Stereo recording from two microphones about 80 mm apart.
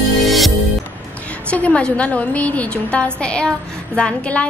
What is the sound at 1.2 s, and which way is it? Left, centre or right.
A woman's voice, centre.